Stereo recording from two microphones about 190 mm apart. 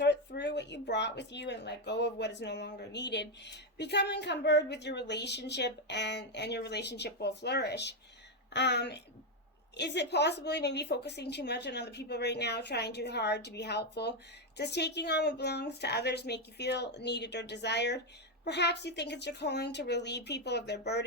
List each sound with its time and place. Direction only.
0.0 s speech: 65° left (ahead or behind)